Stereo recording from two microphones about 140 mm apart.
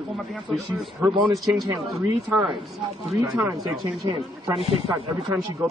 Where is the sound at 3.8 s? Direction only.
25° right (ahead or behind).